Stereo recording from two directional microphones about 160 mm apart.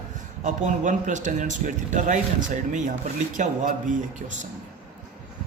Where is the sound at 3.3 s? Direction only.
55° right (ahead or behind).